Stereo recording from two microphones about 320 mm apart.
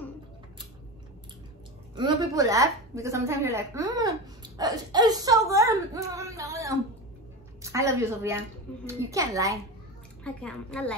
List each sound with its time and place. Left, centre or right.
2.0 s a woman's voice: centre
10.2 s a woman's voice: centre